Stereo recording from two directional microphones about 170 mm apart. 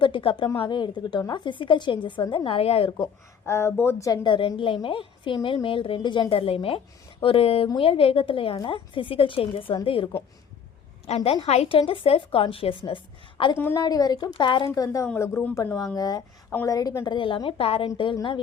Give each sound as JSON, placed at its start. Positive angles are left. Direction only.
{"t": 0.0, "sound": "a woman's voice", "side_deg": 30}
{"t": 3.4, "sound": "a woman's voice", "side_deg": 15}
{"t": 13.6, "sound": "a woman's voice", "side_deg": 10}
{"t": 13.8, "sound": "a woman's voice", "side_deg": 25}